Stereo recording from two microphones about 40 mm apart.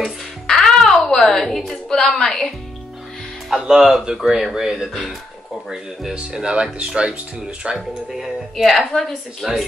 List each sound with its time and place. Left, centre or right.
0.5 s music: centre
1.0 s a woman's voice: centre
1.9 s a woman's voice: centre
3.4 s speech: centre
6.1 s speech: right
8.5 s a woman's voice: centre